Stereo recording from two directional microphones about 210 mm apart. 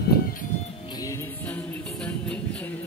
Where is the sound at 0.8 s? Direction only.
15° left (ahead or behind).